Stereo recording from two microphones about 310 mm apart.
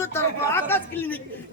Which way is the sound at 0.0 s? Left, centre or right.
Centre.